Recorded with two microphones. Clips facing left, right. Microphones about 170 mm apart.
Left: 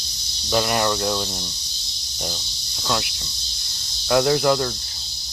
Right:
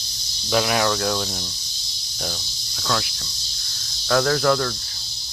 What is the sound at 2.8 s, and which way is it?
Speech, 10° left (ahead or behind).